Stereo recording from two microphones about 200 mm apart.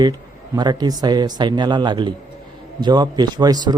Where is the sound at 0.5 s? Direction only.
20° right (ahead or behind).